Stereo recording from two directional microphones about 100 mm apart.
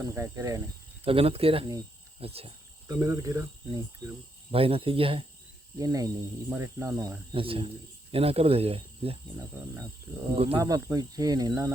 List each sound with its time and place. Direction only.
0.0 s speech: 30° right (ahead or behind)
1.0 s speech: 70° right (ahead or behind)
2.8 s speech: 35° right (ahead or behind)
4.5 s speech: 70° right (ahead or behind)
5.7 s speech: 35° right (ahead or behind)
7.3 s speech: 65° right (ahead or behind)
8.1 s speech: 80° right
10.3 s speech: 75° right (ahead or behind)
10.6 s speech: 30° right (ahead or behind)